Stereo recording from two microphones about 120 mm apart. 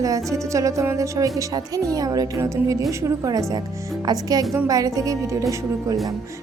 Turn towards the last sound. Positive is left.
turn(degrees=-25)  # may be behind; listen again after turning